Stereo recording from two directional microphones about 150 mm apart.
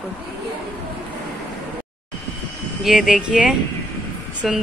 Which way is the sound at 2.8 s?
5° right (ahead or behind).